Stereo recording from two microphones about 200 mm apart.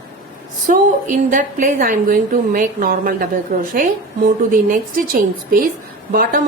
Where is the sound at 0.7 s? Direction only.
40° right (ahead or behind).